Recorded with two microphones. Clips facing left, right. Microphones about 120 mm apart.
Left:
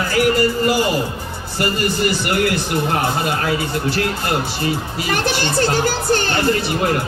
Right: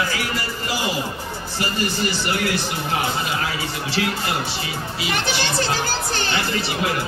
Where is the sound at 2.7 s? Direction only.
50° left (ahead or behind).